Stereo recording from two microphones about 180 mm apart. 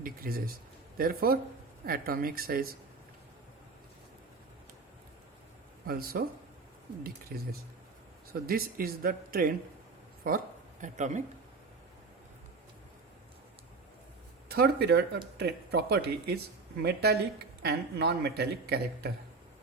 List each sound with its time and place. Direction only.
0.0 s a man's voice: 55° right (ahead or behind)
5.8 s a man's voice: 55° right (ahead or behind)
7.3 s a man's voice: 55° right (ahead or behind)
14.4 s a man's voice: 60° right (ahead or behind)